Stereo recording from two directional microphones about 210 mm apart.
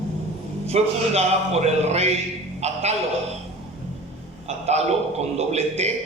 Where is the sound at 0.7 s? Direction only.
30° right (ahead or behind).